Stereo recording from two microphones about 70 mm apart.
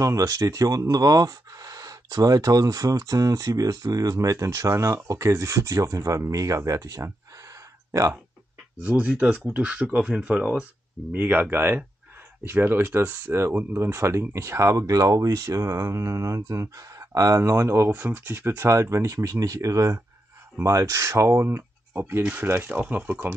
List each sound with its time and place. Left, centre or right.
0.0 s speech: right
8.8 s speech: right
17.4 s speech: right
18.7 s speech: right